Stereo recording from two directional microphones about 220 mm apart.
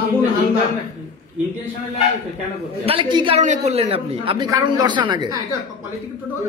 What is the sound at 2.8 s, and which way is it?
A man's voice, 25° right (ahead or behind).